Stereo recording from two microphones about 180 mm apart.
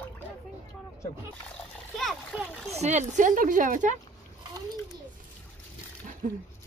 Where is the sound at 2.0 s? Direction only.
Centre (ahead or behind).